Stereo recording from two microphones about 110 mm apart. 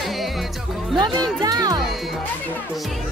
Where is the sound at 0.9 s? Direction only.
40° right (ahead or behind).